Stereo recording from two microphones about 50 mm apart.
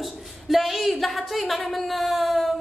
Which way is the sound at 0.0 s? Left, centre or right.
Centre.